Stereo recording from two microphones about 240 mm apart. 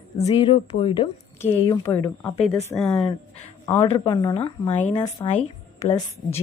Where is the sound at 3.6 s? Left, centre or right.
Centre.